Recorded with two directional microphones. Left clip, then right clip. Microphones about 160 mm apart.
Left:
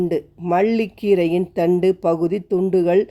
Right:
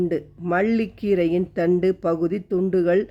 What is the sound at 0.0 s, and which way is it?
Speech, 15° left (ahead or behind).